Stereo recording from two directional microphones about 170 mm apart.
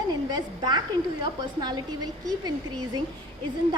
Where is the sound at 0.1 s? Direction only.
25° right (ahead or behind).